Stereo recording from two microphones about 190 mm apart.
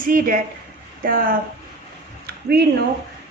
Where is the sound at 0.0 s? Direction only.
45° right (ahead or behind).